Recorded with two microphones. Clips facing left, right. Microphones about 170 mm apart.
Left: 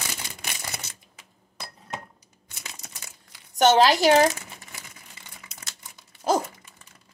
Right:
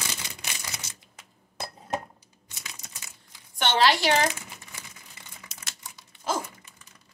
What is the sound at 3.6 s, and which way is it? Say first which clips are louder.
Speech: left 6 dB; 45° left (ahead or behind).